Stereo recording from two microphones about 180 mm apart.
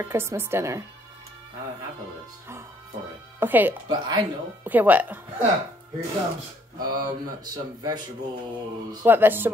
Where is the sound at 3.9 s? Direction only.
20° right (ahead or behind).